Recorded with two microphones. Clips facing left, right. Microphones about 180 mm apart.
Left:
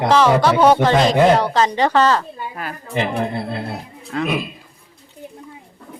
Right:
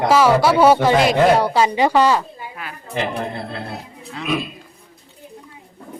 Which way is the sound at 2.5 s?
45° left (ahead or behind).